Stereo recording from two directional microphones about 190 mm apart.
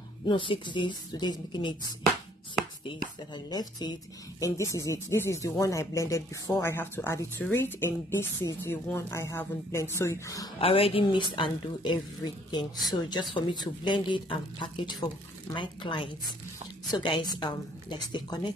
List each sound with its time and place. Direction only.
0.3 s speech: 25° left (ahead or behind)
2.9 s speech: 20° left (ahead or behind)
10.6 s speech: 30° left (ahead or behind)
13.3 s speech: 25° left (ahead or behind)